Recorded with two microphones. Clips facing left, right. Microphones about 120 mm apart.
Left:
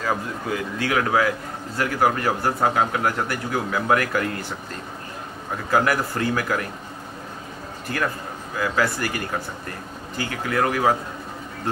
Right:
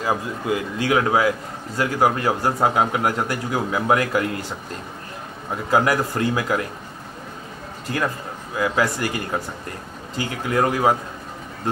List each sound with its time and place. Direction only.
0.0 s a man's voice: 15° right (ahead or behind)
5.7 s a man's voice: 20° right (ahead or behind)
8.5 s a man's voice: 20° right (ahead or behind)